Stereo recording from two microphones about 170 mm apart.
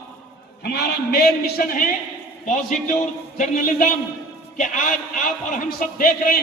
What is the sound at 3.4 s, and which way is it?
A man's voice, 55° left (ahead or behind).